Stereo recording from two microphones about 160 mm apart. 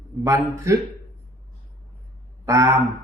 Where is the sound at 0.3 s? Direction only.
15° right (ahead or behind).